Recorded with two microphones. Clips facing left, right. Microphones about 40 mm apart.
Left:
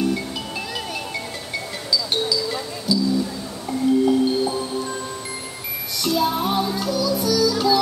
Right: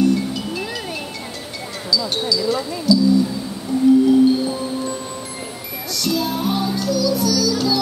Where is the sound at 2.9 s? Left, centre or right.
Left.